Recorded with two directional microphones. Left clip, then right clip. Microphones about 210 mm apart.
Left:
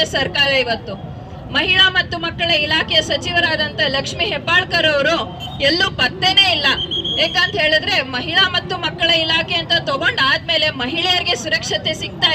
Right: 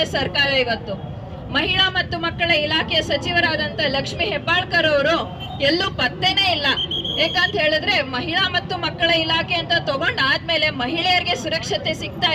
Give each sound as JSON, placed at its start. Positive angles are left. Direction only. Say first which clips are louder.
{"t": 0.0, "sound": "a woman's voice", "louder": "left 3 dB", "side_deg": 20}